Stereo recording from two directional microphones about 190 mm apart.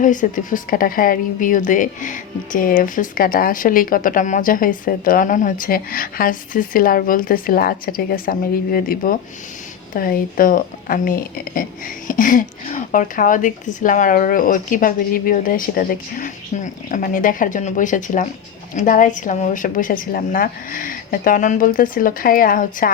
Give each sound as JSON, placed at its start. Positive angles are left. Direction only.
{"t": 0.0, "sound": "speech", "side_deg": 40}